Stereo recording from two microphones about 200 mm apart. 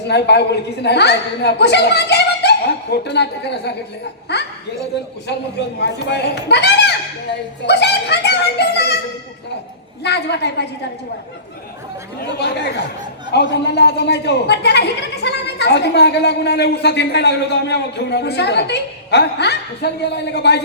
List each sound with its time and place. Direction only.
0.1 s speech: 55° left (ahead or behind)
5.8 s speech: 60° left (ahead or behind)
10.0 s speech: 55° left (ahead or behind)
12.2 s speech: 55° left (ahead or behind)